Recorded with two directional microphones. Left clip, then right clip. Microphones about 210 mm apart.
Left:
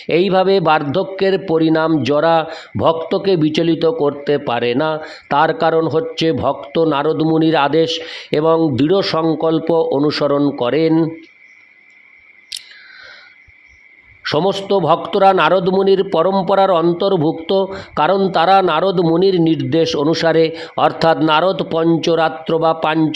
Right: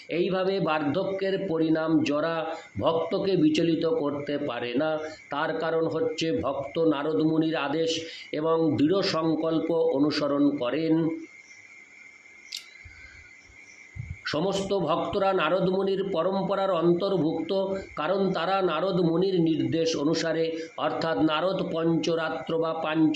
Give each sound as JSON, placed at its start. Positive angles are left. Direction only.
{"t": 0.1, "sound": "a man's voice", "side_deg": 50}
{"t": 14.3, "sound": "a man's voice", "side_deg": 45}